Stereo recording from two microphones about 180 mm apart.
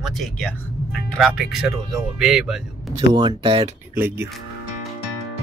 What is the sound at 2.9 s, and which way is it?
Speech, 25° right (ahead or behind).